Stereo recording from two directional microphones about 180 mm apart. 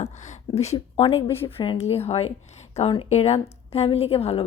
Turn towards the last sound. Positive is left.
turn(degrees=35)  # may be behind; listen again after turning